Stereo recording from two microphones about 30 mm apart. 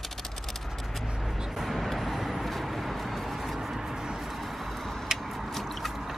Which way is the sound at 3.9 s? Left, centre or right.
Right.